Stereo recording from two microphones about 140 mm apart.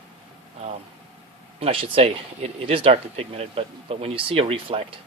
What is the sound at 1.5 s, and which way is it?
Speech, 40° right (ahead or behind).